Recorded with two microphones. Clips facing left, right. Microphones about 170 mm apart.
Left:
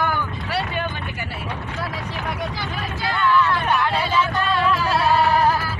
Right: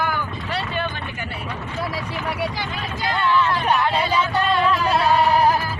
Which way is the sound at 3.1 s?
20° right (ahead or behind).